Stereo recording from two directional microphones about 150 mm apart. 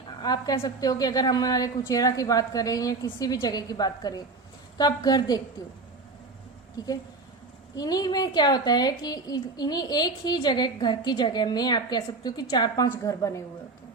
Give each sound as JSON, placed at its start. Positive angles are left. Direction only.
{"t": 0.2, "sound": "a woman's voice", "side_deg": 25}
{"t": 6.8, "sound": "a woman's voice", "side_deg": 25}